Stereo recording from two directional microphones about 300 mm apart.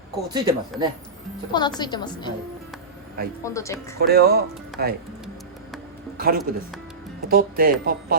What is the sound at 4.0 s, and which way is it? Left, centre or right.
Speech, right.